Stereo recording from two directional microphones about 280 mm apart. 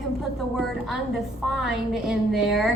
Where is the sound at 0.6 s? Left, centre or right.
Centre.